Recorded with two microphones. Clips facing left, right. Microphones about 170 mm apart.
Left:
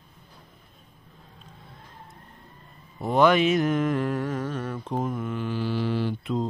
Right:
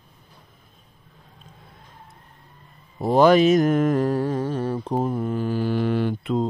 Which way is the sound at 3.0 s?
35° right (ahead or behind).